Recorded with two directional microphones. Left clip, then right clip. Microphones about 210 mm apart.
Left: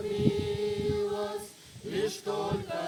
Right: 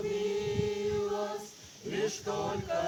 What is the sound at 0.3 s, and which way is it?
Chant, 15° left (ahead or behind).